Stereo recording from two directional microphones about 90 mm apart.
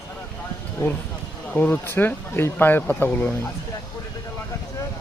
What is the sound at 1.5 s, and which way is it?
Speech, 20° left (ahead or behind).